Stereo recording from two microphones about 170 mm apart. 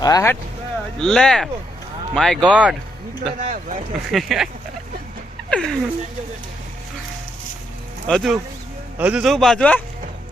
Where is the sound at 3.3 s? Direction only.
50° right (ahead or behind).